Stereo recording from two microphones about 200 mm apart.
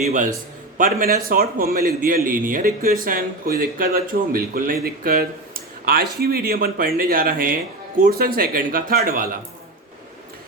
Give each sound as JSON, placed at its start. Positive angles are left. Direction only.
{"t": 0.0, "sound": "a man's voice", "side_deg": -40}